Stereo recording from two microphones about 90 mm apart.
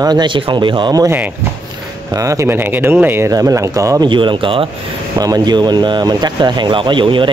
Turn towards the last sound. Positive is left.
turn(degrees=-65)  # may be behind; listen again after turning